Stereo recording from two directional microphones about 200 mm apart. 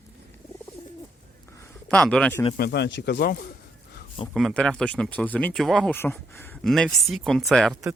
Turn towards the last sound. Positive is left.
turn(degrees=0)  # may be behind; listen again after turning